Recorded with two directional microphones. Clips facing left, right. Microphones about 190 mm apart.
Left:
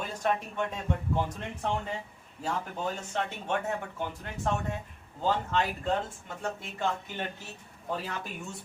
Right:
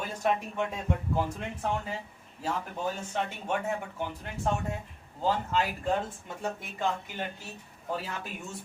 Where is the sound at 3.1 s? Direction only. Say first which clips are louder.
Even; 10° right (ahead or behind).